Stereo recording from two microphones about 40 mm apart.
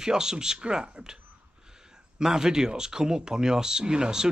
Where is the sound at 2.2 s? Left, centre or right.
Centre.